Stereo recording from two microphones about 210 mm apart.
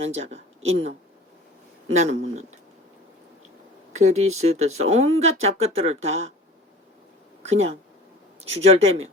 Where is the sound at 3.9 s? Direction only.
30° right (ahead or behind).